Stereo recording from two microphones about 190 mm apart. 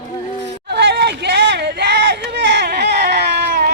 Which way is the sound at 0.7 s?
60° right (ahead or behind).